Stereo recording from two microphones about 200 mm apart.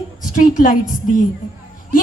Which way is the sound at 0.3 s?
40° left (ahead or behind).